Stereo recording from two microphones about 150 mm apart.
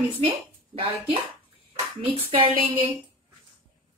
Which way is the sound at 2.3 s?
40° right (ahead or behind).